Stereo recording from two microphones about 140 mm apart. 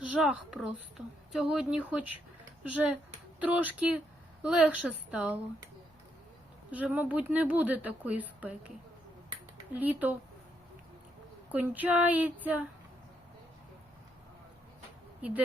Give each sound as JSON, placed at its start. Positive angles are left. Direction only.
{"t": 0.2, "sound": "a woman's voice", "side_deg": -5}
{"t": 6.7, "sound": "a woman's voice", "side_deg": -10}
{"t": 9.7, "sound": "a woman's voice", "side_deg": -10}
{"t": 11.5, "sound": "a woman's voice", "side_deg": -10}